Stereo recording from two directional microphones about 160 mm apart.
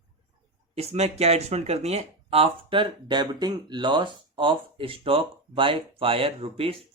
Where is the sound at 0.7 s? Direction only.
40° right (ahead or behind).